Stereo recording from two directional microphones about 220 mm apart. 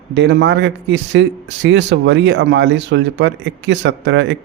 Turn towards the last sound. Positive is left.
turn(degrees=-55)  # may be behind; listen again after turning